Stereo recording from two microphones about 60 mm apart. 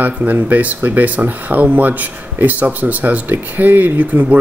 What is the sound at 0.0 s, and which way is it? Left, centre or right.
Speech, right.